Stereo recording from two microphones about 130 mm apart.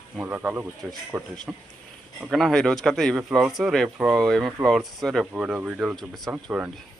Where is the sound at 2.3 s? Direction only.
5° left (ahead or behind).